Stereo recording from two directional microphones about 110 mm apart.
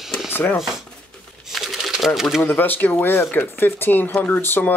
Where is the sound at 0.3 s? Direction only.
20° left (ahead or behind).